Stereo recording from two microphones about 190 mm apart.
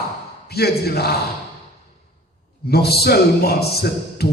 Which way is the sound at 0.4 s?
55° left (ahead or behind).